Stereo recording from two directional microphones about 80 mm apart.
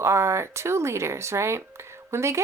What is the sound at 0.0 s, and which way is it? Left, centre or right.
Speech, right.